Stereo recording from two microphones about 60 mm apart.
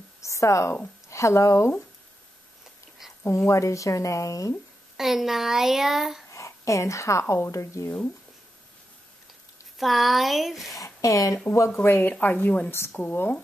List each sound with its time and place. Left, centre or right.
0.2 s a woman's voice: left
3.3 s a woman's voice: left
4.9 s speech: centre
6.3 s a woman's voice: left
9.8 s speech: centre
10.8 s speech: left
11.8 s speech: left
12.1 s speech: left